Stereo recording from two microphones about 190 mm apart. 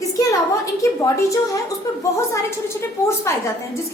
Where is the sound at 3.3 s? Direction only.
15° left (ahead or behind).